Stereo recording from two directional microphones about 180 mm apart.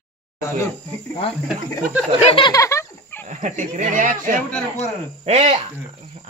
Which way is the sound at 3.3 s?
40° right (ahead or behind).